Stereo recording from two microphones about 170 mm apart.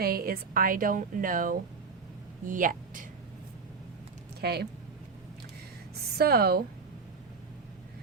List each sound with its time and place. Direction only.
0.0 s a woman's voice: 60° right (ahead or behind)
4.4 s speech: 70° right (ahead or behind)
6.1 s a woman's voice: 65° right (ahead or behind)